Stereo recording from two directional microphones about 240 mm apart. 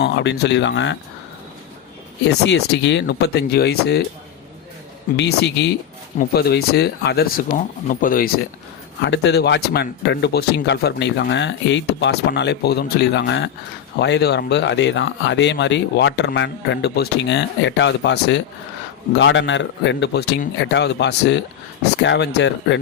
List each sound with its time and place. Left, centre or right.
0.0 s speech: left
2.2 s speech: left
5.1 s speech: left
9.0 s speech: left